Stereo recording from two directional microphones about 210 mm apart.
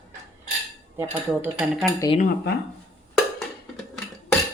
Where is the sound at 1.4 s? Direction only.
10° right (ahead or behind).